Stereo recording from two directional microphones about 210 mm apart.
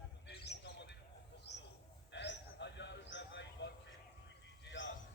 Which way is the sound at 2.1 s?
55° left (ahead or behind).